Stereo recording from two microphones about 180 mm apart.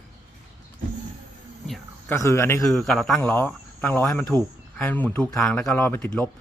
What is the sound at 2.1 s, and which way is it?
Speech, 15° left (ahead or behind).